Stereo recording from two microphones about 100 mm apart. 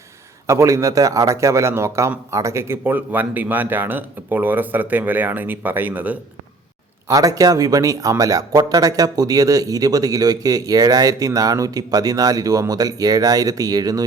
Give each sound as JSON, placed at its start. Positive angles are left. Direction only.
{"t": 0.4, "sound": "a man's voice", "side_deg": -30}
{"t": 7.1, "sound": "speech", "side_deg": -35}